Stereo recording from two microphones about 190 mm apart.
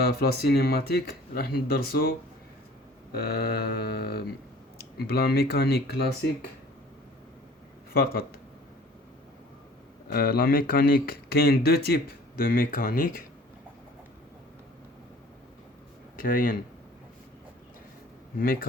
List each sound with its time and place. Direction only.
0.0 s speech: 55° left (ahead or behind)
7.9 s speech: 55° left (ahead or behind)
10.1 s speech: 55° left (ahead or behind)
16.1 s speech: 45° left (ahead or behind)
18.3 s speech: 50° left (ahead or behind)